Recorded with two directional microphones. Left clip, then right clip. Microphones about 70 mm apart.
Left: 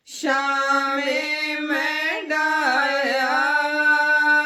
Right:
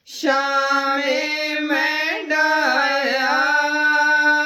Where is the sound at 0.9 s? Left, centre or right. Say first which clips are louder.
Right 3 dB; left.